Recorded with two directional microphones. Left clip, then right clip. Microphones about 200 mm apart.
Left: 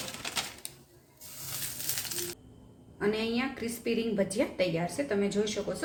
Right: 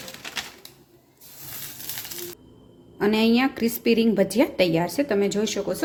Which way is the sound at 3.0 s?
50° right (ahead or behind).